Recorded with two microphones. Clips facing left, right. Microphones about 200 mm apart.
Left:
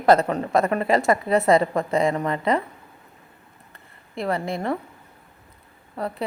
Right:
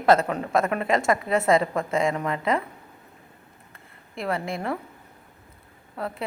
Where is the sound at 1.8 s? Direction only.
35° left (ahead or behind).